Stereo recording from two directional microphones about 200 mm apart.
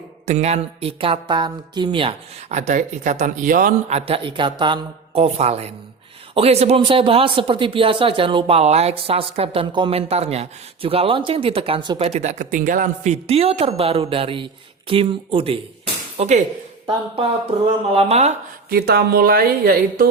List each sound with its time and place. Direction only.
0.3 s speech: 35° right (ahead or behind)
17.9 s speech: 35° right (ahead or behind)
18.7 s speech: 50° right (ahead or behind)